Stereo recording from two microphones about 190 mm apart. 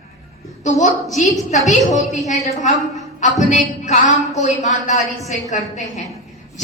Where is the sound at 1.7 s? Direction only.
40° left (ahead or behind).